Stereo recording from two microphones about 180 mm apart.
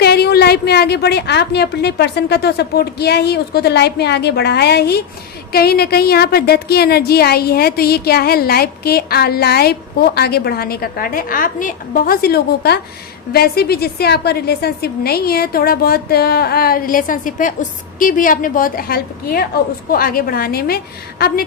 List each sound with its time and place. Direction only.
0.0 s a woman's voice: 60° left (ahead or behind)